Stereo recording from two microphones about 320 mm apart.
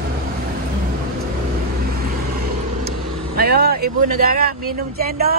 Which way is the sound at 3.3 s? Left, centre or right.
Right.